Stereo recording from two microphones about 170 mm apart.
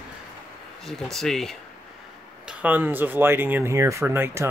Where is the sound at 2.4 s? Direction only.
10° right (ahead or behind).